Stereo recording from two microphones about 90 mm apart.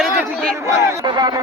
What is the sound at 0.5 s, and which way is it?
Speech, 30° right (ahead or behind).